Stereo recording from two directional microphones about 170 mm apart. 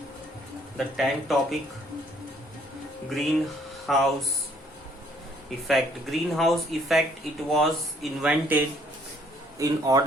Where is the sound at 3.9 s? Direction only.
Centre (ahead or behind).